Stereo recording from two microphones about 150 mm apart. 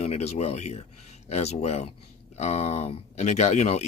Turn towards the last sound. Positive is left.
turn(degrees=50)  # may be behind; listen again after turning